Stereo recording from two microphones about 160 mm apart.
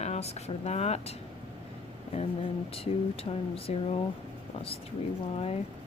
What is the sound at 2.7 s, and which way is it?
A woman's voice, 35° left (ahead or behind).